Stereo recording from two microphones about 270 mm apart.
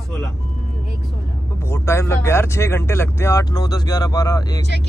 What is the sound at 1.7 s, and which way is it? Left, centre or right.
Speech, centre.